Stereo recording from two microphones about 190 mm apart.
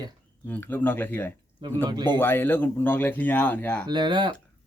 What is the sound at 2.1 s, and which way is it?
Speech, 10° left (ahead or behind).